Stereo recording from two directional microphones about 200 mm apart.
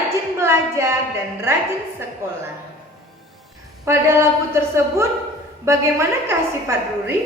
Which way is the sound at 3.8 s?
15° right (ahead or behind).